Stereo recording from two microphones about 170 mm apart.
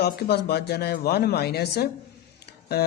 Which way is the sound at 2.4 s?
70° left (ahead or behind).